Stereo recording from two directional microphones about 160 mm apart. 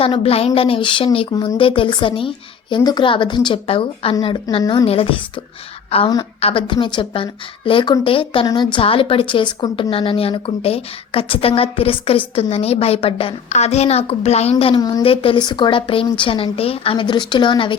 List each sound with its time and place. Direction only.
0.0 s a woman's voice: 35° left (ahead or behind)
4.6 s a woman's voice: 20° left (ahead or behind)
4.9 s a woman's voice: 35° left (ahead or behind)
14.8 s a woman's voice: 25° left (ahead or behind)
15.0 s a woman's voice: 35° left (ahead or behind)